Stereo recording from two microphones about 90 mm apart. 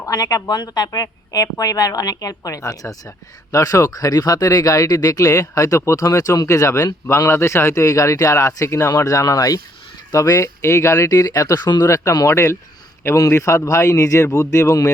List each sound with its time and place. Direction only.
0.0 s speech: 40° left (ahead or behind)
11.9 s speech: 35° left (ahead or behind)